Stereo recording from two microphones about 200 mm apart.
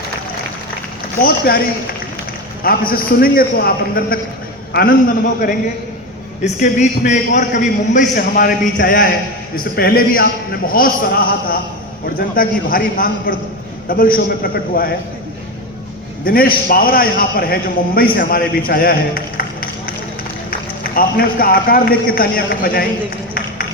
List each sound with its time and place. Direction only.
1.2 s a man's voice: 50° left (ahead or behind)
2.6 s a man's voice: 45° left (ahead or behind)
6.4 s a man's voice: 35° left (ahead or behind)
16.2 s a man's voice: 45° left (ahead or behind)